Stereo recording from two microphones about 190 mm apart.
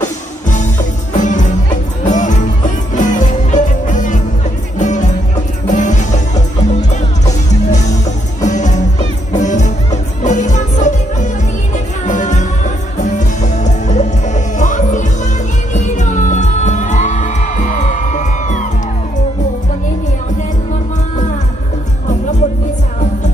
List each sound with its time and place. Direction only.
0.0 s music: 40° left (ahead or behind)